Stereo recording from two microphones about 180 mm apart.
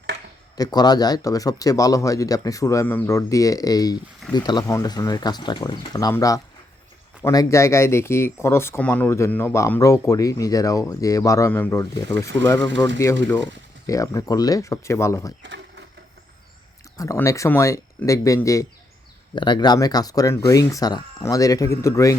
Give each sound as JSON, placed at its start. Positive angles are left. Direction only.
{"t": 0.5, "sound": "speech", "side_deg": 20}
{"t": 17.0, "sound": "speech", "side_deg": 15}